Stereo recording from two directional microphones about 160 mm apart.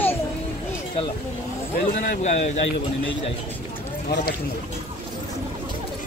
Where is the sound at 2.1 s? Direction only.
45° left (ahead or behind).